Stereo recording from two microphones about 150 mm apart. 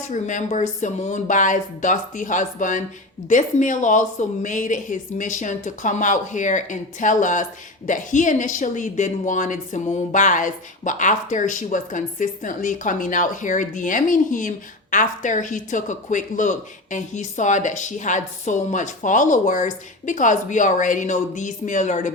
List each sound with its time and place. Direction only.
0.1 s a woman's voice: 55° left (ahead or behind)